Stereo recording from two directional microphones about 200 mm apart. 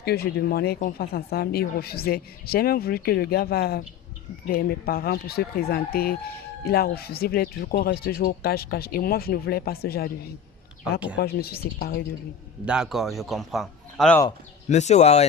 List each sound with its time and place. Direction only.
0.0 s speech: 50° left (ahead or behind)
11.2 s speech: 50° left (ahead or behind)
12.6 s a man's voice: 5° right (ahead or behind)
14.7 s speech: 35° left (ahead or behind)